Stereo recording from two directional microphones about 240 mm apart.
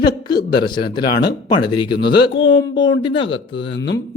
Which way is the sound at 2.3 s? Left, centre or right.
Left.